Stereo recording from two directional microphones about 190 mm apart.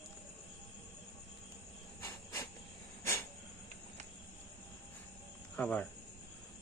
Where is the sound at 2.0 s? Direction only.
15° left (ahead or behind).